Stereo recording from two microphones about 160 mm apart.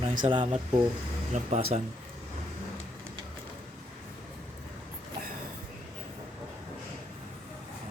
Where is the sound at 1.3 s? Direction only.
45° right (ahead or behind).